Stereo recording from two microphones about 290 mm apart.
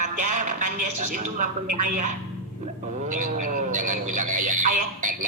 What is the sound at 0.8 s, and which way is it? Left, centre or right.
Speech, right.